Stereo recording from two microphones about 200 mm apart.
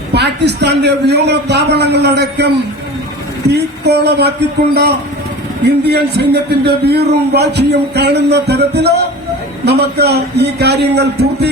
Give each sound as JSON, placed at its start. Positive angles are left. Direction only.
{"t": 0.1, "sound": "a man's voice", "side_deg": -60}
{"t": 3.5, "sound": "a man's voice", "side_deg": -55}